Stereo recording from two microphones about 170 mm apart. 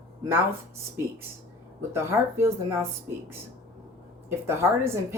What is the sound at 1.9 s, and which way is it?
Speech, 15° right (ahead or behind).